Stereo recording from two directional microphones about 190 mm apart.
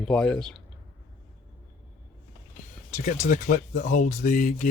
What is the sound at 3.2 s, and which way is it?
Speech, 45° left (ahead or behind).